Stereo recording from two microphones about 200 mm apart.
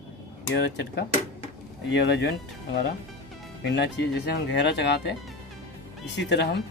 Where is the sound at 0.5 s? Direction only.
60° left (ahead or behind).